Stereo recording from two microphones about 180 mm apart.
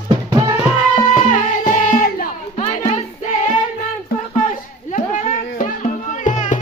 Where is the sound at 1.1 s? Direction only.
45° left (ahead or behind).